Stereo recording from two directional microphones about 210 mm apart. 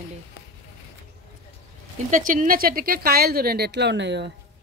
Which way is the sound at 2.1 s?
40° right (ahead or behind).